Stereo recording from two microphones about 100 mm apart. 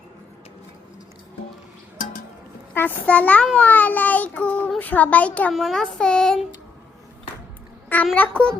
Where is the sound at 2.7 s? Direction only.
15° left (ahead or behind).